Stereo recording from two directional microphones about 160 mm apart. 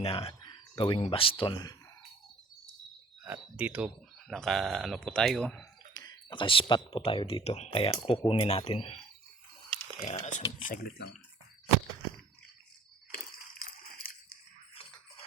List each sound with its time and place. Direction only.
0.0 s speech: 35° left (ahead or behind)
3.2 s speech: 10° right (ahead or behind)
5.9 s speech: 25° left (ahead or behind)
10.0 s speech: 45° left (ahead or behind)
10.6 s speech: 60° left (ahead or behind)
13.5 s dog: 65° left (ahead or behind)